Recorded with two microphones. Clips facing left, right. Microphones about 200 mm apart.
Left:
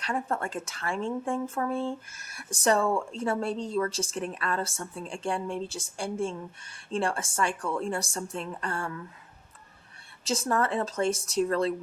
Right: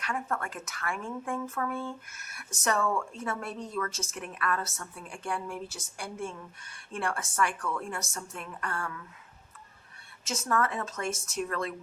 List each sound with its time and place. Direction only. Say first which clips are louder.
0.0 s speech: left 3 dB; 30° left (ahead or behind)
10.2 s a woman's voice: left 3 dB; 30° left (ahead or behind)